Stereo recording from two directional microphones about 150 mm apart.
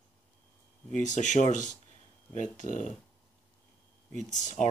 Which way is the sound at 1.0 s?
55° left (ahead or behind).